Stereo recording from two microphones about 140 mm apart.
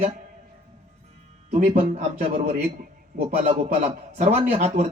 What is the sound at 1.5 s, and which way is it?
Speech, 55° right (ahead or behind).